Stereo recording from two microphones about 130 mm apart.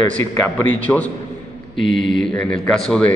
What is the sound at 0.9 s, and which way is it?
A man's voice, 5° left (ahead or behind).